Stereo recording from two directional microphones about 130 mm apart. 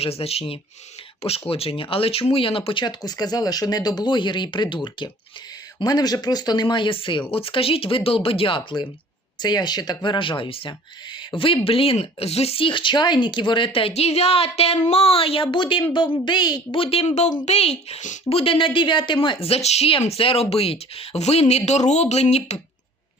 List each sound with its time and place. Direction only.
0.0 s speech: 50° left (ahead or behind)
18.3 s speech: 45° left (ahead or behind)